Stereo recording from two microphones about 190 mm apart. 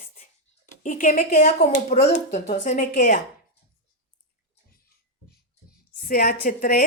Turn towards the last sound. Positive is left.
turn(degrees=50)  # may be behind; listen again after turning